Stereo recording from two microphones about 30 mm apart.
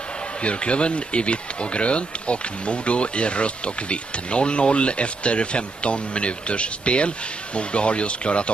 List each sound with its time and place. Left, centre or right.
0.4 s speech: left